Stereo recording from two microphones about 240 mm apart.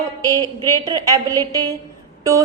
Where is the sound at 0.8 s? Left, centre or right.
Centre.